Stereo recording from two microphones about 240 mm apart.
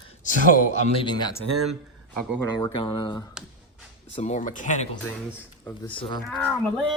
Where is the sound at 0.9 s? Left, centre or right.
Centre.